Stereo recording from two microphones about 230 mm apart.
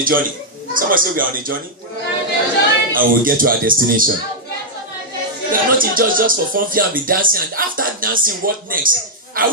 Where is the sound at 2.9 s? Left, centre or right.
Right.